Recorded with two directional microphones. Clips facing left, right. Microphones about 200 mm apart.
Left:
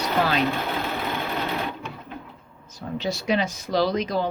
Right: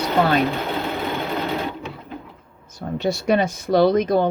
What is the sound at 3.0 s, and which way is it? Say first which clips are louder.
Speech: right 5 dB; 55° right (ahead or behind).